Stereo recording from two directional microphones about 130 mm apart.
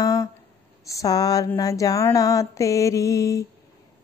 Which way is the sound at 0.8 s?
25° left (ahead or behind).